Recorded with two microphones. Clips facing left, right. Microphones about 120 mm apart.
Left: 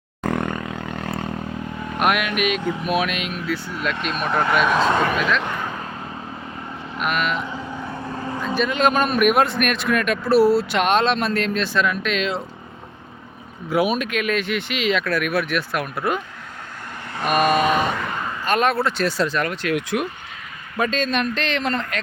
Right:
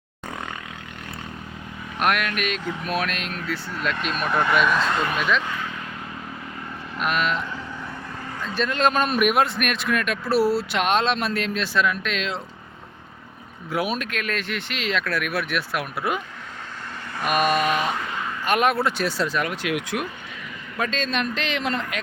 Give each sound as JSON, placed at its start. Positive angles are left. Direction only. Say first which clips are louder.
{"t": 0.3, "sound": "roar", "louder": "left 10 dB", "side_deg": 60}
{"t": 2.0, "sound": "speech", "louder": "left 3 dB", "side_deg": 10}
{"t": 5.4, "sound": "vehicle", "louder": "left 3 dB", "side_deg": 50}
{"t": 6.9, "sound": "speech", "louder": "left 1 dB", "side_deg": 0}
{"t": 8.5, "sound": "speech", "louder": "left 2 dB", "side_deg": 5}
{"t": 13.7, "sound": "speech", "louder": "left 5 dB", "side_deg": 0}
{"t": 17.6, "sound": "a sound", "louder": "left 3 dB", "side_deg": 40}
{"t": 18.4, "sound": "speech", "louder": "left 1 dB", "side_deg": -15}
{"t": 19.0, "sound": "speech", "louder": "left 3 dB", "side_deg": -5}